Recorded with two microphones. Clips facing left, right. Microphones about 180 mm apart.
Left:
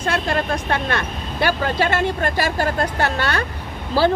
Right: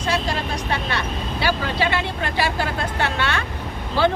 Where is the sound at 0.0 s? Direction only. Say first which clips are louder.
Left 2 dB; 55° left (ahead or behind).